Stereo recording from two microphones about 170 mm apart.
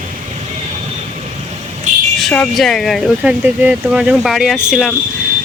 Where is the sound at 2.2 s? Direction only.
Centre (ahead or behind).